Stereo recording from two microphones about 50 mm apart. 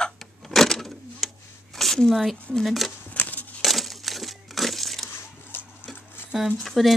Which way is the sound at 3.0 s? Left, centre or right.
Left.